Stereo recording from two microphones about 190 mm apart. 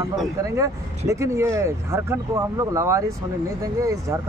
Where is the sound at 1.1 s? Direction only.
15° right (ahead or behind).